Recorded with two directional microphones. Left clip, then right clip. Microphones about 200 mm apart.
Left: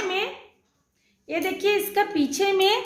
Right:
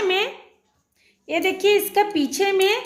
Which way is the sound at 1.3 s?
30° right (ahead or behind).